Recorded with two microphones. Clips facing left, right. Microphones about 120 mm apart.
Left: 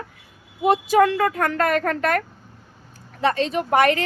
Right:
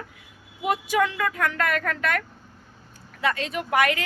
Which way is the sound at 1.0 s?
45° left (ahead or behind).